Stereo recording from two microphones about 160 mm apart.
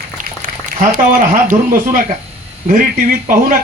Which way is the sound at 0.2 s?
55° right (ahead or behind).